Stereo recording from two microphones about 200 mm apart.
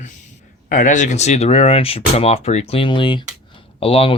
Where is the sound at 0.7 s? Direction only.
40° left (ahead or behind).